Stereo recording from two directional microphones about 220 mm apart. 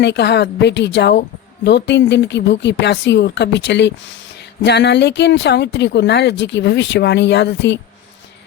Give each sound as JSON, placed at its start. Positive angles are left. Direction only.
{"t": 0.0, "sound": "speech", "side_deg": 50}